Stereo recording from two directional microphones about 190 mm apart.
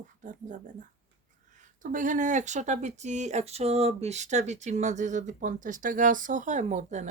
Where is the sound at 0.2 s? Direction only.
40° right (ahead or behind).